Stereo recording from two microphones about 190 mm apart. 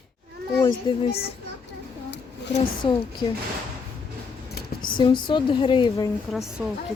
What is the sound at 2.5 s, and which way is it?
Speech, 25° left (ahead or behind).